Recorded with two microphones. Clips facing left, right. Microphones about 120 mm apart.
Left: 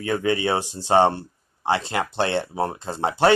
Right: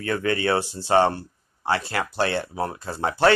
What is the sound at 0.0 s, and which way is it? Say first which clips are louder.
Speech: left 1 dB; 15° left (ahead or behind).